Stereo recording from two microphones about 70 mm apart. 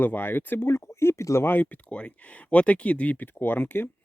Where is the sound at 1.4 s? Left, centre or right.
Left.